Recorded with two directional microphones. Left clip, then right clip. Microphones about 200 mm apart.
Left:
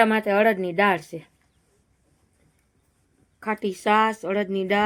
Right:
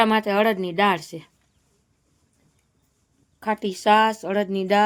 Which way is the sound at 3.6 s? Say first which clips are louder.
Right 3 dB; 20° right (ahead or behind).